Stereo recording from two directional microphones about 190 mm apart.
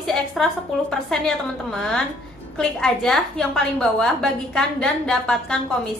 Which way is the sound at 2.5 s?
5° left (ahead or behind).